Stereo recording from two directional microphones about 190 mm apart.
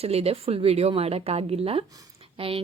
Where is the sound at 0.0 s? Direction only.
30° right (ahead or behind).